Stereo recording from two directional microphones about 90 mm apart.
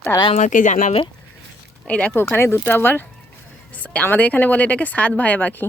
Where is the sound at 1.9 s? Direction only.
15° left (ahead or behind).